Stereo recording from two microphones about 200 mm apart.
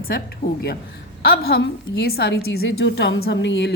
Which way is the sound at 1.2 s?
50° left (ahead or behind).